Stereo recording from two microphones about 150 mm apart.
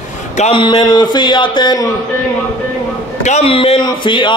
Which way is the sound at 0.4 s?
35° left (ahead or behind).